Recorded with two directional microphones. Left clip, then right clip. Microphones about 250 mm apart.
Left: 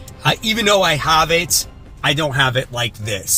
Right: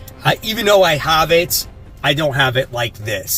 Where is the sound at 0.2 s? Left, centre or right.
Centre.